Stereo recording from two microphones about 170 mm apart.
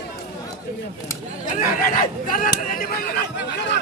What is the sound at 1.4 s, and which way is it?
Speech, 50° left (ahead or behind).